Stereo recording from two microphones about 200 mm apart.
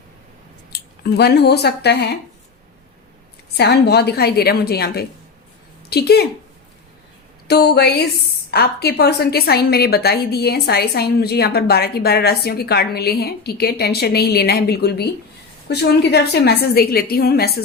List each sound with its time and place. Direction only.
0.7 s speech: 55° left (ahead or behind)
3.6 s a woman's voice: 55° left (ahead or behind)
7.4 s a woman's voice: 55° left (ahead or behind)